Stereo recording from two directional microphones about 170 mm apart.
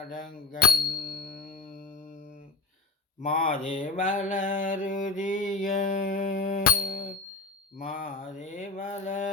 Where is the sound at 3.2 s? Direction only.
55° left (ahead or behind).